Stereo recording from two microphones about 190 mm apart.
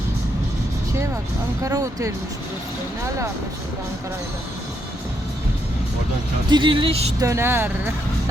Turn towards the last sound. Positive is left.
turn(degrees=-10)  # may be behind; listen again after turning